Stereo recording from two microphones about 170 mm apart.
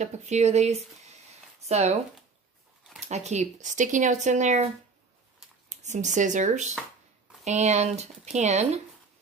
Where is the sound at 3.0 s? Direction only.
40° right (ahead or behind).